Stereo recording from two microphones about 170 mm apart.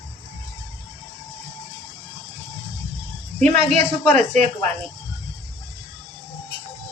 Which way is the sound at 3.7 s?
45° right (ahead or behind).